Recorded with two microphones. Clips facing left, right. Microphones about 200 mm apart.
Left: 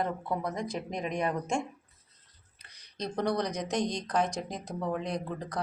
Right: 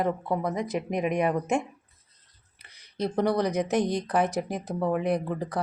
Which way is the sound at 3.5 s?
60° right (ahead or behind).